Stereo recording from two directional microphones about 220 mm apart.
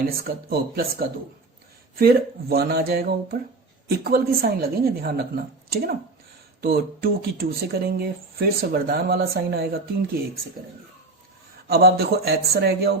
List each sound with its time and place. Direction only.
0.1 s speech: 45° right (ahead or behind)
11.7 s speech: 45° right (ahead or behind)